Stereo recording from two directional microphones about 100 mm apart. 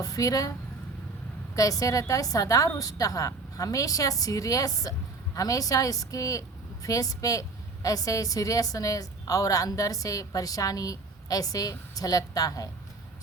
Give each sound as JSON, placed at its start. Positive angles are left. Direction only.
{"t": 0.0, "sound": "a woman's voice", "side_deg": 35}
{"t": 1.5, "sound": "a woman's voice", "side_deg": 35}